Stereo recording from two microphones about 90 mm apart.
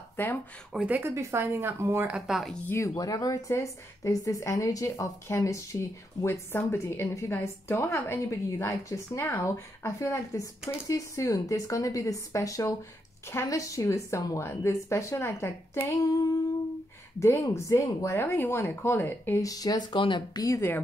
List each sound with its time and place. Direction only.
0.2 s a woman's voice: 20° left (ahead or behind)
0.7 s speech: 15° right (ahead or behind)
1.1 s speech: 30° right (ahead or behind)
2.0 s speech: 5° right (ahead or behind)
2.4 s speech: 10° left (ahead or behind)
2.7 s a woman's voice: 30° left (ahead or behind)
3.0 s a woman's voice: 40° left (ahead or behind)
17.2 s a woman's voice: 30° left (ahead or behind)
19.4 s speech: 45° left (ahead or behind)
20.0 s speech: 60° left (ahead or behind)